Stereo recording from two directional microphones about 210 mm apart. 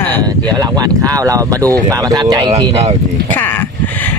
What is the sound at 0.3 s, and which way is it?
Speech, 20° right (ahead or behind).